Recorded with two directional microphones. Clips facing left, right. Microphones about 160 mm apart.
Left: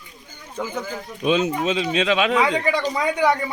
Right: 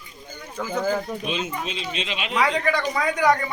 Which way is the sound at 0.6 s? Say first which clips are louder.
Left 2 dB; 20° left (ahead or behind).